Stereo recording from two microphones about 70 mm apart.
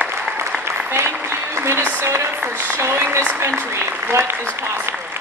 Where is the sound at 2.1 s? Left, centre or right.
Right.